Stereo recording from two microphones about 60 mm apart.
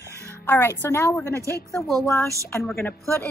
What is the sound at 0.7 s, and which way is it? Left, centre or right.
Speech, left.